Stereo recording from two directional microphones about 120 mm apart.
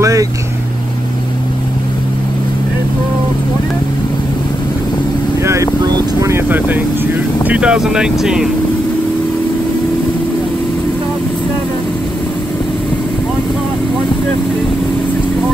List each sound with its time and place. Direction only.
0.0 s vehicle: 25° right (ahead or behind)
5.4 s vehicle: 25° right (ahead or behind)
7.4 s speech: 10° right (ahead or behind)